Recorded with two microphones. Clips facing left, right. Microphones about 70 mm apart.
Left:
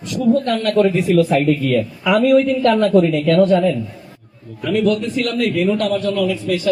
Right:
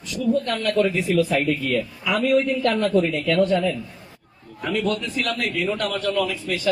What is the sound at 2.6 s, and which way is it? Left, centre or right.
Speech, left.